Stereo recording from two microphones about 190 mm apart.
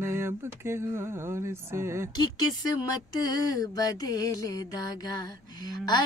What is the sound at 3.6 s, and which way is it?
Speech, 20° left (ahead or behind).